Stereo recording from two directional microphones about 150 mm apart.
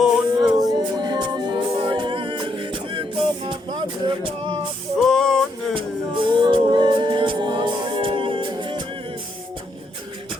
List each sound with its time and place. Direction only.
0.0 s music: centre (ahead or behind)
0.5 s a capella: 25° right (ahead or behind)
4.9 s a sound: 5° left (ahead or behind)
5.7 s a capella: 35° right (ahead or behind)